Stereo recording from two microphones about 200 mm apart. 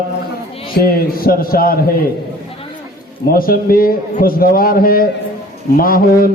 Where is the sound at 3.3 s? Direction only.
45° left (ahead or behind).